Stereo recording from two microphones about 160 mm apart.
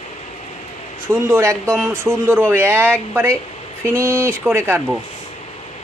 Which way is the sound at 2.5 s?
15° right (ahead or behind).